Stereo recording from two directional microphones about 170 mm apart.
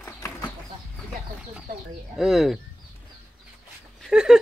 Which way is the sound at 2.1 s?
Centre (ahead or behind).